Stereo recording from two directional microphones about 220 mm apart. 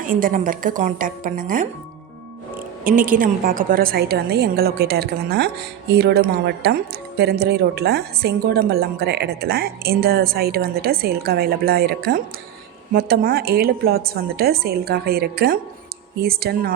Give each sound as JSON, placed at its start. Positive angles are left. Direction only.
{"t": 0.0, "sound": "a woman's voice", "side_deg": -40}
{"t": 2.8, "sound": "speech", "side_deg": -35}